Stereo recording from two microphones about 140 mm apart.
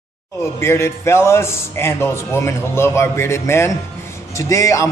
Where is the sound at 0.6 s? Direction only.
20° left (ahead or behind).